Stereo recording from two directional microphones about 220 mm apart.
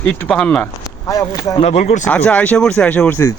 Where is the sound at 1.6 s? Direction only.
30° left (ahead or behind).